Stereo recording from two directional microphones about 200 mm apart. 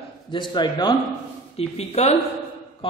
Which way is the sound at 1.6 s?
30° left (ahead or behind).